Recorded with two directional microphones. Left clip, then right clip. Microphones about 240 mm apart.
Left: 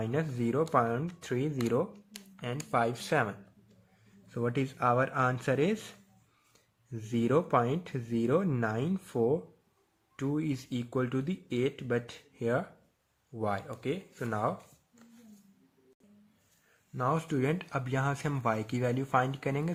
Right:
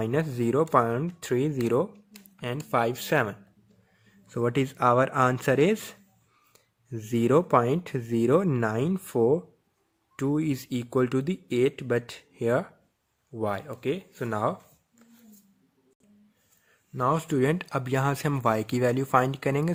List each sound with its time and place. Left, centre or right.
0.0 s speech: right
16.9 s speech: right